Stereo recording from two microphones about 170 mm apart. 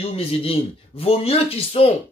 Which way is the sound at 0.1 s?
35° left (ahead or behind).